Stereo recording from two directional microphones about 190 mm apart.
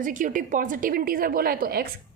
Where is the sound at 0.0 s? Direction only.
45° right (ahead or behind).